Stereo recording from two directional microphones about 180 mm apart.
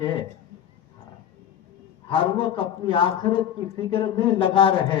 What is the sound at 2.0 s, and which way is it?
A man's voice, 30° left (ahead or behind).